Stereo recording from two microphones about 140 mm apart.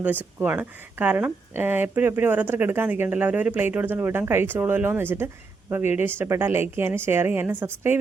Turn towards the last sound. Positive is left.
turn(degrees=-15)  # may be behind; listen again after turning